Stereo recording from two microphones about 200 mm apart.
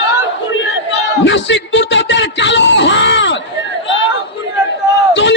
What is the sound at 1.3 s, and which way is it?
Speech, 65° left (ahead or behind).